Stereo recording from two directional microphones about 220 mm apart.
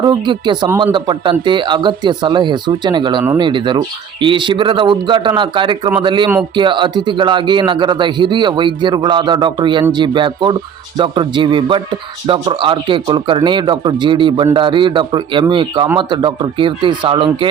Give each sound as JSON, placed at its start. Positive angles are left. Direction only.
{"t": 0.0, "sound": "speech", "side_deg": -20}